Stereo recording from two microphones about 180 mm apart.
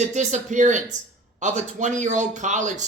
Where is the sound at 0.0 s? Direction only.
40° right (ahead or behind).